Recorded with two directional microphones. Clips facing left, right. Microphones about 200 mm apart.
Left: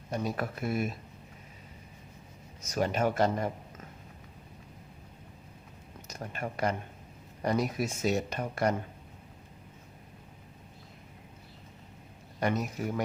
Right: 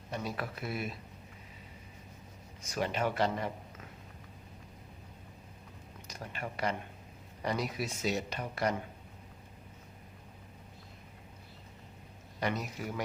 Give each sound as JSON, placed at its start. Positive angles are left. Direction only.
{"t": 0.1, "sound": "speech", "side_deg": 45}
{"t": 2.6, "sound": "speech", "side_deg": 45}
{"t": 6.1, "sound": "speech", "side_deg": 45}
{"t": 12.4, "sound": "speech", "side_deg": 50}